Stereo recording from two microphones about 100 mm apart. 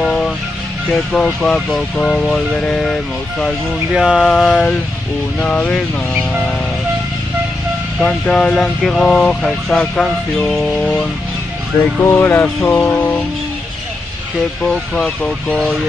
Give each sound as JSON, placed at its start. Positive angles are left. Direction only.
{"t": 0.0, "sound": "vehicle", "side_deg": 10}
{"t": 1.1, "sound": "speech", "side_deg": 10}
{"t": 3.9, "sound": "a sound", "side_deg": -5}
{"t": 5.4, "sound": "speech", "side_deg": 15}
{"t": 8.0, "sound": "speech", "side_deg": 10}
{"t": 12.0, "sound": "speech", "side_deg": 20}
{"t": 12.6, "sound": "a sound", "side_deg": 15}
{"t": 14.7, "sound": "speech", "side_deg": 5}